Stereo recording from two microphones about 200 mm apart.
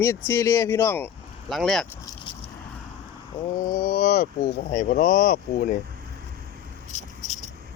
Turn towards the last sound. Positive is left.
turn(degrees=35)  # may be behind; listen again after turning